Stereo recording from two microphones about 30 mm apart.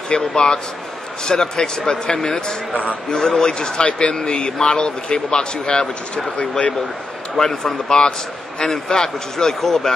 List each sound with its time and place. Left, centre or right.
0.1 s a man's voice: left
2.7 s speech: left
3.1 s a man's voice: centre
3.8 s a man's voice: left
7.3 s a man's voice: centre
8.5 s a man's voice: centre